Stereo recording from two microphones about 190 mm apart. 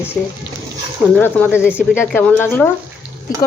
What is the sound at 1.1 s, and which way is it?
Speech, 10° left (ahead or behind).